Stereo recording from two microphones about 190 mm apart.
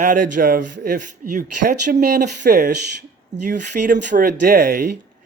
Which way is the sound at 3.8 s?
50° right (ahead or behind).